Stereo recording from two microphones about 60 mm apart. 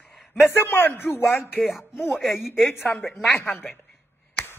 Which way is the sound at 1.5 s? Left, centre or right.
Centre.